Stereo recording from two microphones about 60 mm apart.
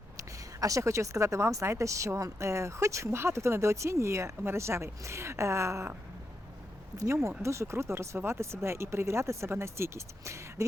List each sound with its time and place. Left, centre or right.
0.2 s speech: right
6.9 s speech: right